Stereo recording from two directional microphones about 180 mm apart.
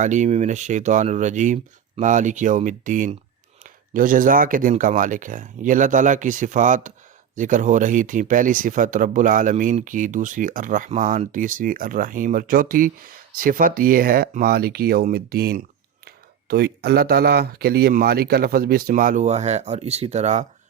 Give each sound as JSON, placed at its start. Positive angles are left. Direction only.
{"t": 0.0, "sound": "speech", "side_deg": -45}